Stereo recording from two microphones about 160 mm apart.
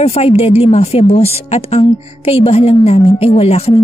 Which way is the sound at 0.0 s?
40° left (ahead or behind).